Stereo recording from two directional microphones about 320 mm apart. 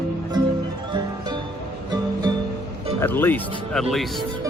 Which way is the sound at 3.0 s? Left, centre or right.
Centre.